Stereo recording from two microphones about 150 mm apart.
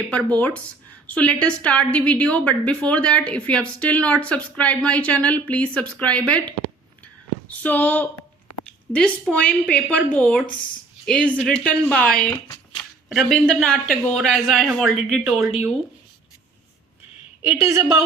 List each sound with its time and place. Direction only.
0.3 s a woman's voice: 10° left (ahead or behind)
7.6 s a woman's voice: 10° left (ahead or behind)
17.6 s a woman's voice: 20° right (ahead or behind)